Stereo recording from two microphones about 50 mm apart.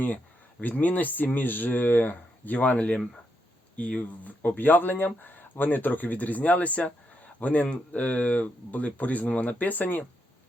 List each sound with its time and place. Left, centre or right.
0.7 s speech: left